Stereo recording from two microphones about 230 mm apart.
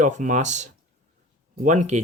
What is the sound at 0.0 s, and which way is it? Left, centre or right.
Speech, right.